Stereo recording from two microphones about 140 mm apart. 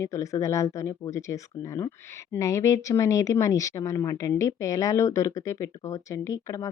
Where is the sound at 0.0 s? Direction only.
20° left (ahead or behind).